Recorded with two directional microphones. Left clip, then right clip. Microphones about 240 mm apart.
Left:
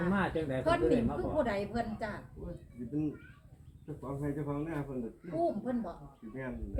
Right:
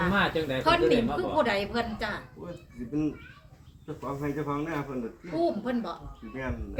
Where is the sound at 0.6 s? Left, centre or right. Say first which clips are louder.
Right 6 dB; right.